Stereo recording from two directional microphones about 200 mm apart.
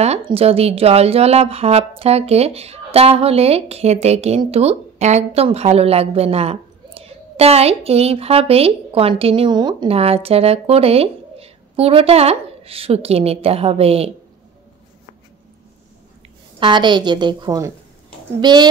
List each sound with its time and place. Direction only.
0.0 s speech: 30° right (ahead or behind)
16.5 s a woman's voice: 25° right (ahead or behind)